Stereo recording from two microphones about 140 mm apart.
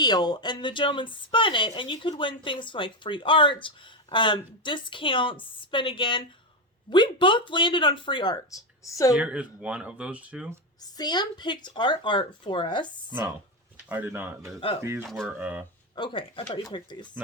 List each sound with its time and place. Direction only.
0.0 s a woman's voice: 30° left (ahead or behind)
9.1 s speech: 10° right (ahead or behind)
10.9 s a woman's voice: 30° left (ahead or behind)
13.8 s speech: 15° right (ahead or behind)
15.0 s speech: centre (ahead or behind)
15.4 s speech: 10° right (ahead or behind)
16.0 s a woman's voice: 35° left (ahead or behind)